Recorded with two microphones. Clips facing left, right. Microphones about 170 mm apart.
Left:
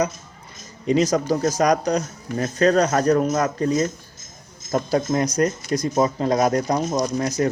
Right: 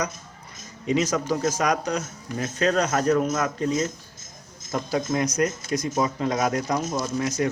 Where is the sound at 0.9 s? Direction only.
35° left (ahead or behind).